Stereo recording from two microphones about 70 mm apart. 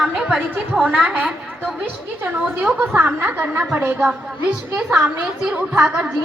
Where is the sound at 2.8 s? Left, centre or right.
Right.